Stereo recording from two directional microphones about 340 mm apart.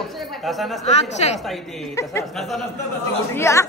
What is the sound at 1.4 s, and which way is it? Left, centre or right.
A woman's voice, centre.